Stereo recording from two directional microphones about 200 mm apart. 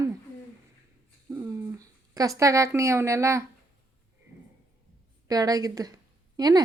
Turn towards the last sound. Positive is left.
turn(degrees=-20)  # may be behind; listen again after turning